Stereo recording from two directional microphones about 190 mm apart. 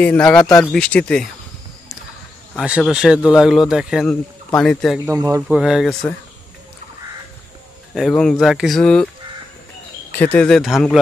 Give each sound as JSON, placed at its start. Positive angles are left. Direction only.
{"t": 0.0, "sound": "speech", "side_deg": 5}
{"t": 2.5, "sound": "speech", "side_deg": -5}
{"t": 5.0, "sound": "speech", "side_deg": -15}
{"t": 5.6, "sound": "speech", "side_deg": 0}
{"t": 7.9, "sound": "speech", "side_deg": 0}
{"t": 10.1, "sound": "speech", "side_deg": 10}